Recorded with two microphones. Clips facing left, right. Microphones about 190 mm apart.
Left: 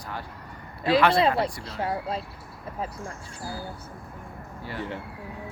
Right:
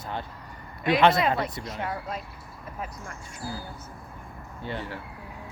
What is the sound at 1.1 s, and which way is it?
Speech, 30° left (ahead or behind).